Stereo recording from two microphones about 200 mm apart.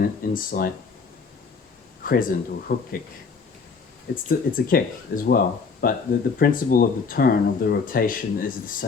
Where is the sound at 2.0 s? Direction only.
45° left (ahead or behind).